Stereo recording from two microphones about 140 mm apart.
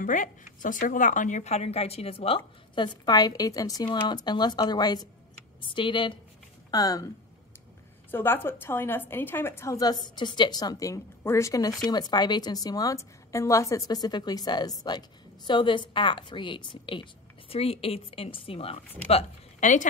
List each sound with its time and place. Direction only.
0.0 s a woman's voice: 65° left (ahead or behind); by 6.1 s 35° left (ahead or behind)
6.7 s a woman's voice: 25° left (ahead or behind)
8.1 s a woman's voice: 15° left (ahead or behind); by 18.8 s 40° left (ahead or behind)
19.0 s speech: 55° left (ahead or behind)